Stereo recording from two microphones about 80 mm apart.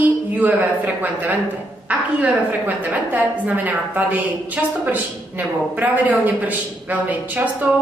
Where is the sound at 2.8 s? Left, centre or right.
Right.